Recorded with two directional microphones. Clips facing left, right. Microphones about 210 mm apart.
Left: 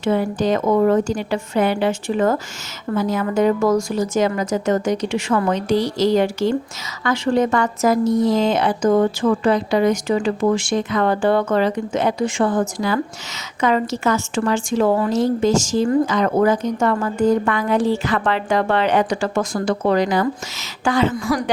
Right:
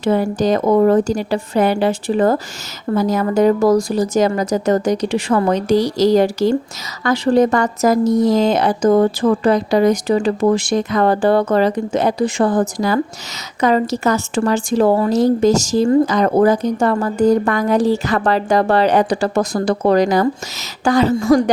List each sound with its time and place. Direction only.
0.0 s a woman's voice: 40° right (ahead or behind)